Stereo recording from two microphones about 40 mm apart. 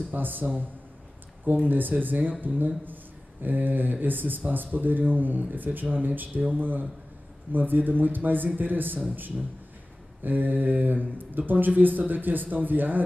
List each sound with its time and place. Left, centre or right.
0.1 s speech: right